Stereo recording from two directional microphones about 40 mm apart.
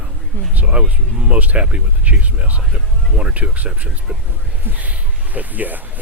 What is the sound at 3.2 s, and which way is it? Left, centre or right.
Speech, right.